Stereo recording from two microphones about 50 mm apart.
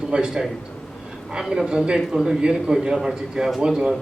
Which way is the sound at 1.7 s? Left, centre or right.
Centre.